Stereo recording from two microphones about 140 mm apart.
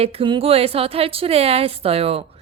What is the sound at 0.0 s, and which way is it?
A woman's voice, 40° right (ahead or behind).